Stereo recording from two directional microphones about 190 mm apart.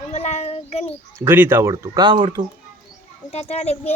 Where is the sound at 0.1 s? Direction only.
35° left (ahead or behind).